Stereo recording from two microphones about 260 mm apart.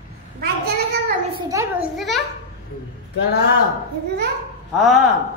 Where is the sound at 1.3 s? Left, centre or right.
Centre.